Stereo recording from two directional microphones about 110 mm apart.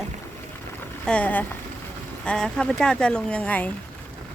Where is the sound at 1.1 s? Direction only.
15° left (ahead or behind).